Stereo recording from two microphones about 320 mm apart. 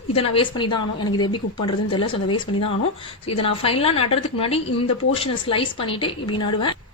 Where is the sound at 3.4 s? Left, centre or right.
Centre.